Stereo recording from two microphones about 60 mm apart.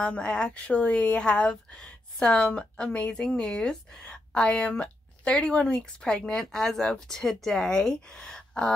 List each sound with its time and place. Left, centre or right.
0.0 s a woman's voice: centre